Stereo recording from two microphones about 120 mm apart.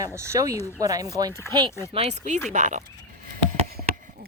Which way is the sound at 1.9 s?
60° right (ahead or behind).